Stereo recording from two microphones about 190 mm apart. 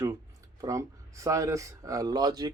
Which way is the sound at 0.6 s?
15° right (ahead or behind).